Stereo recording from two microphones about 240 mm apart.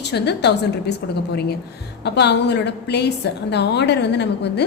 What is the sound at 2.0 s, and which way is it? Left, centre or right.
A woman's voice, left.